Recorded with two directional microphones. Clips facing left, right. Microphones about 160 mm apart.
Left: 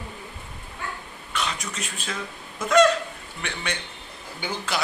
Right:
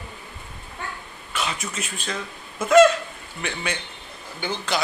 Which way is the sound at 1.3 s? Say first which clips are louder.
Right 1 dB; 5° right (ahead or behind).